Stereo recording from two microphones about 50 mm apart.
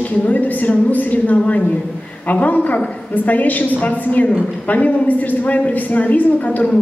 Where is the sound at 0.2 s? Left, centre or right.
Left.